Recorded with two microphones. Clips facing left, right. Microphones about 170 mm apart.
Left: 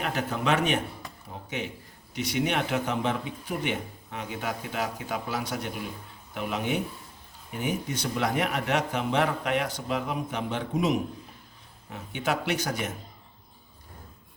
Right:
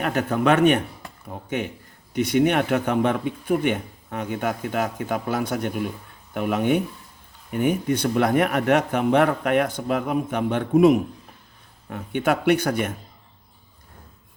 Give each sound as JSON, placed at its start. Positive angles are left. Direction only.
{"t": 0.0, "sound": "a man's voice", "side_deg": -50}